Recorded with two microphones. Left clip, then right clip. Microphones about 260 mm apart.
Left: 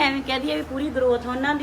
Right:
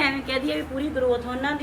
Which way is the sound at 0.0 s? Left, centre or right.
Left.